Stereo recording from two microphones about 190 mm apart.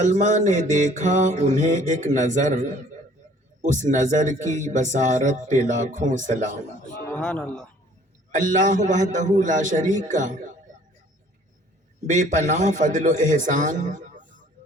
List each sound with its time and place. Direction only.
0.0 s speech: 40° right (ahead or behind)
7.2 s speech: 5° left (ahead or behind)
8.3 s speech: 40° right (ahead or behind)
12.0 s speech: 40° right (ahead or behind)